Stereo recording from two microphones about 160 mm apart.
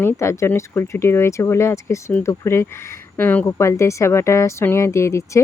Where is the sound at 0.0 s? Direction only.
20° left (ahead or behind).